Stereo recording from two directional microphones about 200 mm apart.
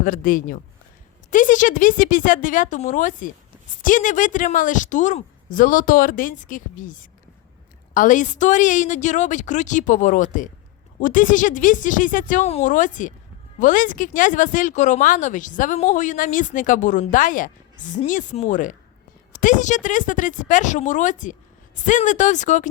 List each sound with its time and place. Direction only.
0.0 s speech: 45° left (ahead or behind)